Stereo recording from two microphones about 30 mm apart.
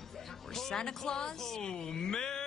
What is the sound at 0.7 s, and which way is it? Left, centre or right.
Speech, left.